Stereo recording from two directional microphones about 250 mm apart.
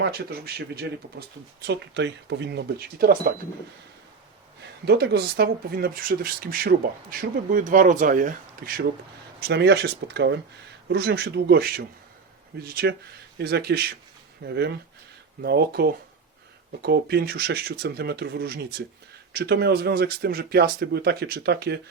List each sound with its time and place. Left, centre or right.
0.0 s speech: right
4.9 s speech: right